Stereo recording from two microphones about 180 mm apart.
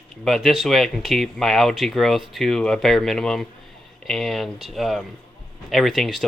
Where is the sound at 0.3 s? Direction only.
Centre (ahead or behind).